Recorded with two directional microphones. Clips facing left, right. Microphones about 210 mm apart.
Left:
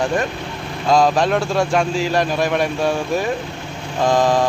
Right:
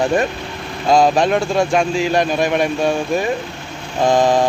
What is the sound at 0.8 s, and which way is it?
Speech, 25° right (ahead or behind).